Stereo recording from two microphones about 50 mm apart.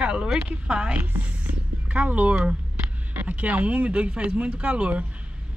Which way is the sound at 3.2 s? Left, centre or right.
Right.